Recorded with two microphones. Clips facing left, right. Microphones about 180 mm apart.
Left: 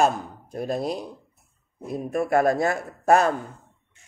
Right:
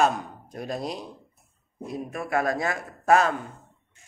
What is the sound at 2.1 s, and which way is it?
Speech, 45° left (ahead or behind).